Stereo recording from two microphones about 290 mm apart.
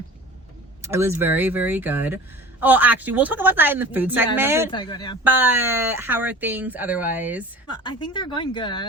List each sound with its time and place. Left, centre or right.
0.8 s speech: centre
4.7 s speech: centre
5.2 s speech: centre
7.7 s speech: centre